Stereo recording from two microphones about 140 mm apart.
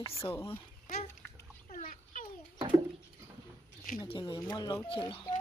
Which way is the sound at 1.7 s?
70° left (ahead or behind).